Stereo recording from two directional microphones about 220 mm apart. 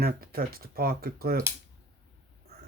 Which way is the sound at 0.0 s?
45° right (ahead or behind).